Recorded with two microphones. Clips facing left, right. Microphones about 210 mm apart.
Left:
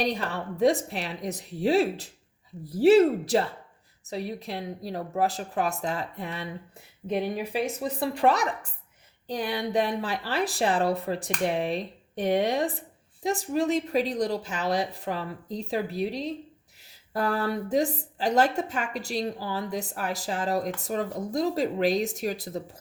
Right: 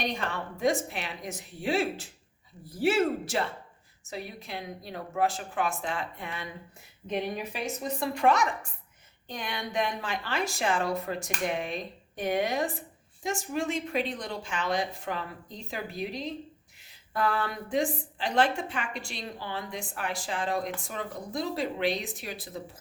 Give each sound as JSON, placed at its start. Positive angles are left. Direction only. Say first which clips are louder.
{"t": 0.0, "sound": "a woman's voice", "louder": "left 4 dB", "side_deg": 35}